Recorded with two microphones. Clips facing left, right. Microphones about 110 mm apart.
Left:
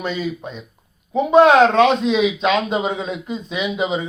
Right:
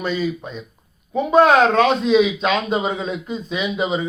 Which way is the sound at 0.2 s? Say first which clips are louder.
Right 2 dB; 15° left (ahead or behind).